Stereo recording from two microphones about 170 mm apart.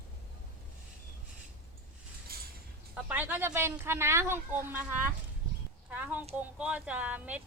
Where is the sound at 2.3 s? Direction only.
65° right (ahead or behind).